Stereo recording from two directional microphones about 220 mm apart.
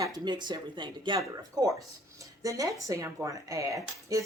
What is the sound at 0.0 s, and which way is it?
Speech, 20° right (ahead or behind).